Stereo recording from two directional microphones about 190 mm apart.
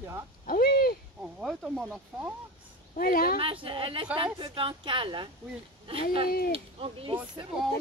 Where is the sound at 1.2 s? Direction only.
Centre (ahead or behind).